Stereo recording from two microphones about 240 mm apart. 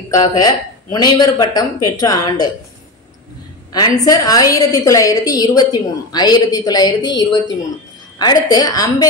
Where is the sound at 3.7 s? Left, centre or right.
Centre.